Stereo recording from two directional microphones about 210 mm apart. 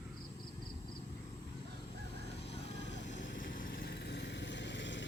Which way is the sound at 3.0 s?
35° left (ahead or behind).